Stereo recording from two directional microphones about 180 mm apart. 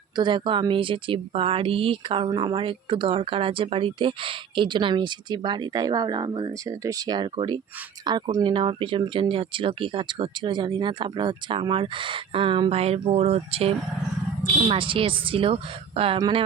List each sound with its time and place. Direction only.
0.2 s speech: 25° right (ahead or behind)